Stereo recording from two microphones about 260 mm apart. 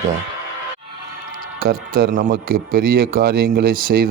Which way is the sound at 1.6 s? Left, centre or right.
Right.